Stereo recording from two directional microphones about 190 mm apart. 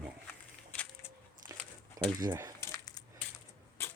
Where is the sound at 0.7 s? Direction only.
5° left (ahead or behind).